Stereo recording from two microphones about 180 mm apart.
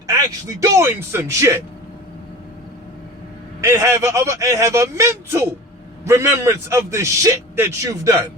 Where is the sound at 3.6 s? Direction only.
15° right (ahead or behind).